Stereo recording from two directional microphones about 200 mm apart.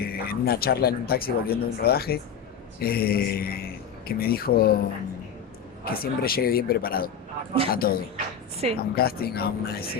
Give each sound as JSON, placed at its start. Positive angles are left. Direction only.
{"t": 0.0, "sound": "speech", "side_deg": 50}
{"t": 5.8, "sound": "speech", "side_deg": 50}